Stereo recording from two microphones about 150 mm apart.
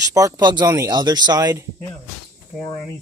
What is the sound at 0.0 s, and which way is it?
Speech, 25° right (ahead or behind).